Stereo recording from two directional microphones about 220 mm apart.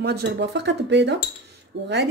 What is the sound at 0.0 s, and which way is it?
Speech, 50° right (ahead or behind).